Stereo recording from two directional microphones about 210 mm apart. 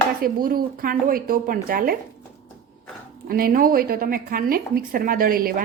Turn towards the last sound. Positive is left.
turn(degrees=-45)  # may be behind; listen again after turning